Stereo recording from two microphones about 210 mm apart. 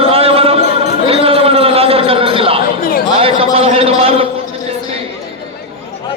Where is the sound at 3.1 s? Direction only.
25° right (ahead or behind).